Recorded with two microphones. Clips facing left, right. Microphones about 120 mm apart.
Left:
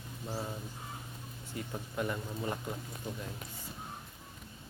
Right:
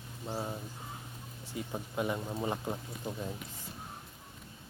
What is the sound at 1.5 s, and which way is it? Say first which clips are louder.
Speech: right 2 dB; 15° right (ahead or behind).